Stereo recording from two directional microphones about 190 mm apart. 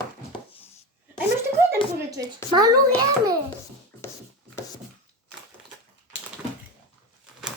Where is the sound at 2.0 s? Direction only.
20° right (ahead or behind).